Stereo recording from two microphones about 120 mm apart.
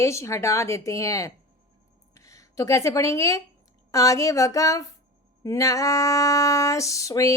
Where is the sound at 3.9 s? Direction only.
30° left (ahead or behind).